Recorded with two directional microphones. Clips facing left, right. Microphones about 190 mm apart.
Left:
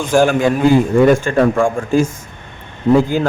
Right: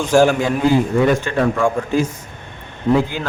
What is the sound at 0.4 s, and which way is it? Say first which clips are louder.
A man's voice: left 4 dB; 50° left (ahead or behind).